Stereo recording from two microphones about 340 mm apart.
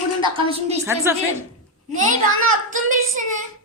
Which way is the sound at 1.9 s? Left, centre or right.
Right.